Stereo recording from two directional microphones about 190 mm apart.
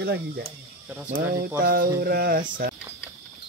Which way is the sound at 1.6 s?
50° right (ahead or behind).